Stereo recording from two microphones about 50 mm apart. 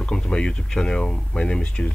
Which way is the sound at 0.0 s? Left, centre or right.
Centre.